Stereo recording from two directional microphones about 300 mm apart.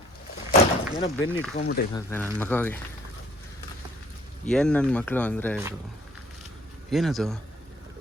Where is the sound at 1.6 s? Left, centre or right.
Left.